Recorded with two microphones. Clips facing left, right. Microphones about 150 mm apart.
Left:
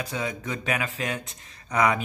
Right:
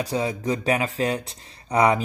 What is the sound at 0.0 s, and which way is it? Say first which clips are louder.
Speech: right 6 dB; 35° right (ahead or behind).